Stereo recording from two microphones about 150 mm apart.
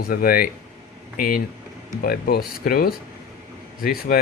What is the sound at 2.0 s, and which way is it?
Speech, 90° left.